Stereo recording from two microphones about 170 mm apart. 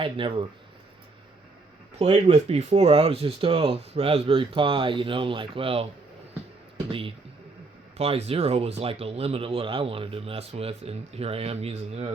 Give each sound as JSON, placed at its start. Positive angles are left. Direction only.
{"t": 0.0, "sound": "speech", "side_deg": -30}
{"t": 2.0, "sound": "speech", "side_deg": -40}
{"t": 7.9, "sound": "speech", "side_deg": -40}